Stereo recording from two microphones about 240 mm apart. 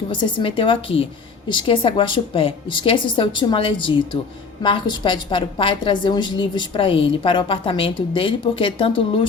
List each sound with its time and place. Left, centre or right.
0.1 s a woman's voice: left